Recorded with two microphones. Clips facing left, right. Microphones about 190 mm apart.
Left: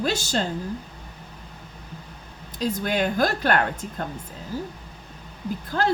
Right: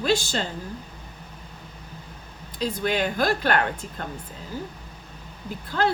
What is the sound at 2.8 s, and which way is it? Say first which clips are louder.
Speech: left 1 dB; 45° left (ahead or behind).